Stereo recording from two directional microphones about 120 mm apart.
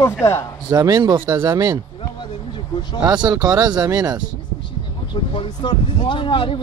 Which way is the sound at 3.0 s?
35° right (ahead or behind).